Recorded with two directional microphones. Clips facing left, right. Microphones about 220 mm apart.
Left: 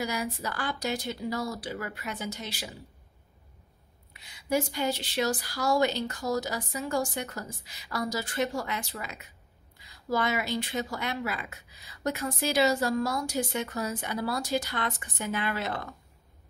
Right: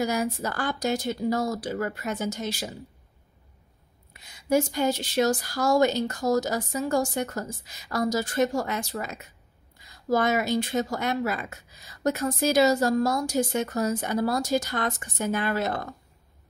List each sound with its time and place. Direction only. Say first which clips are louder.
0.0 s speech: right 6 dB; 45° right (ahead or behind)
4.1 s speech: right 5 dB; 45° right (ahead or behind)